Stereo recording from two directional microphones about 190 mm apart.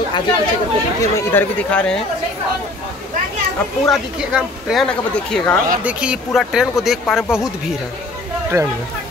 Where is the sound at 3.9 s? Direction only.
Centre (ahead or behind).